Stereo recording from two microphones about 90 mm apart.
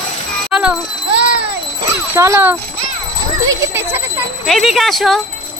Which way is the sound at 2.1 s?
30° right (ahead or behind).